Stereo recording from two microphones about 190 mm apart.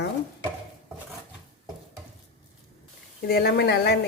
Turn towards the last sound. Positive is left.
turn(degrees=60)  # may be behind; listen again after turning